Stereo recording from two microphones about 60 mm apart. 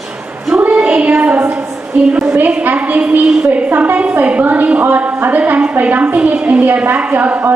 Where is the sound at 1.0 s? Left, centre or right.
Right.